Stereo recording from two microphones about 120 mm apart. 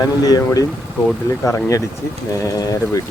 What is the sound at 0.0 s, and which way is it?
Speech, 30° left (ahead or behind).